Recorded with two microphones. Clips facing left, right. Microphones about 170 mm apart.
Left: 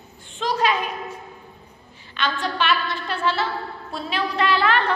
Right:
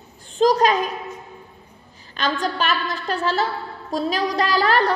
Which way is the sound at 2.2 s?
40° right (ahead or behind).